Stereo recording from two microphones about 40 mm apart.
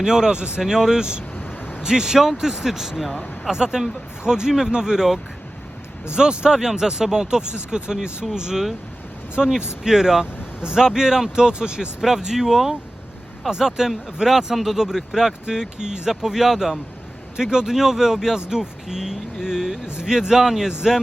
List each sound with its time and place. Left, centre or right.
0.0 s speech: centre
0.6 s speech: centre
1.4 s a sound: left
1.8 s speech: centre
6.1 s speech: centre